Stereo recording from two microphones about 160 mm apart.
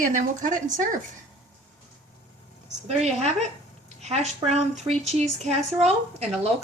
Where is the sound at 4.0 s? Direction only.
45° right (ahead or behind).